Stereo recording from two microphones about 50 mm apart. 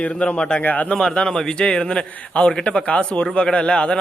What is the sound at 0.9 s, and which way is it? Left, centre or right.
A man's voice, centre.